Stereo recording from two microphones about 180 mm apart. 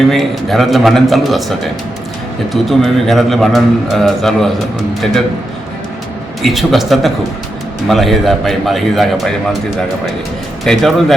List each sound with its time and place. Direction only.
0.1 s a man's voice: centre (ahead or behind)
6.4 s a man's voice: centre (ahead or behind)
10.6 s a man's voice: centre (ahead or behind)